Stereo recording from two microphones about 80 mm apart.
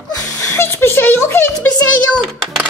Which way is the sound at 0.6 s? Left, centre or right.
Left.